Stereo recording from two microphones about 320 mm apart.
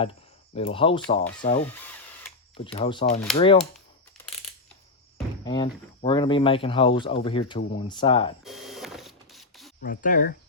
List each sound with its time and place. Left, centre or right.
0.0 s speech: centre
2.6 s speech: centre
5.1 s cricket: centre
5.6 s speech: centre
8.4 s printer: centre
9.8 s speech: left